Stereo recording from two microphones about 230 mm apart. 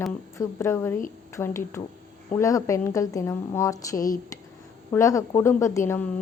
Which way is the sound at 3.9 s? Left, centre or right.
Left.